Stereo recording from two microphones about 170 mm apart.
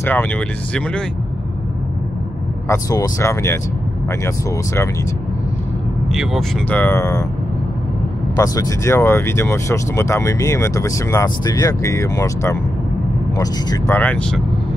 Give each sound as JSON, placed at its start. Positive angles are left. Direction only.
{"t": 0.0, "sound": "speech", "side_deg": 10}
{"t": 2.7, "sound": "speech", "side_deg": 20}
{"t": 6.7, "sound": "speech", "side_deg": 15}
{"t": 8.4, "sound": "speech", "side_deg": 20}
{"t": 13.9, "sound": "speech", "side_deg": 10}